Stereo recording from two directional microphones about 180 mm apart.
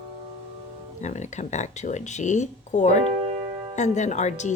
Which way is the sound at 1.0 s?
40° left (ahead or behind).